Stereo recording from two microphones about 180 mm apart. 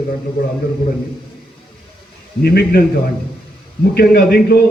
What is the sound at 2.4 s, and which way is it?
Speech, 60° left (ahead or behind).